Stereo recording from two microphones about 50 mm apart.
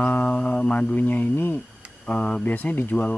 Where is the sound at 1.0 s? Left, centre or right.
Left.